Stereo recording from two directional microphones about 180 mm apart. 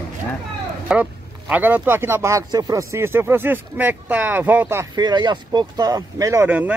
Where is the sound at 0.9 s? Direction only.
5° right (ahead or behind).